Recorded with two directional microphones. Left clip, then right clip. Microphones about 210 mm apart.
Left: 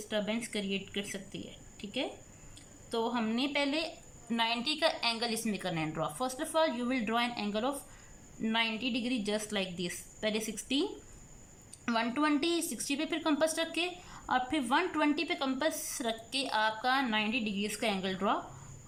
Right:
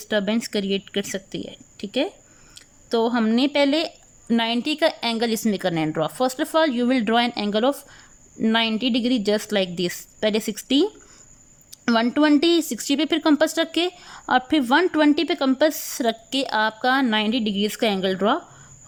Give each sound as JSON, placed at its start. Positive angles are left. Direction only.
{"t": 0.1, "sound": "a woman's voice", "side_deg": -45}
{"t": 11.9, "sound": "speech", "side_deg": -40}